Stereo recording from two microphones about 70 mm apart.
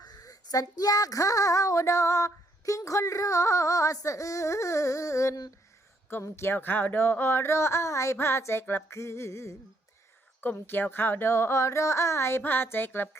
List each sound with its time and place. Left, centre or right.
0.0 s speech: left
10.4 s speech: left
12.4 s speech: left